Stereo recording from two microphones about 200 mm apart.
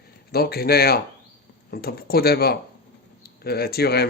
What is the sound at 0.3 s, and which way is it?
Speech, 50° left (ahead or behind).